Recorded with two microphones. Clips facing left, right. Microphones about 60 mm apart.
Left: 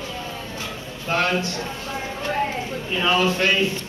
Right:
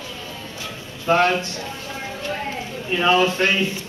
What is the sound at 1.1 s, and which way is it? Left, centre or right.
Speech, right.